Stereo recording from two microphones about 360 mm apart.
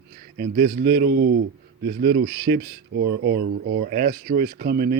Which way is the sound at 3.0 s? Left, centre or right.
Right.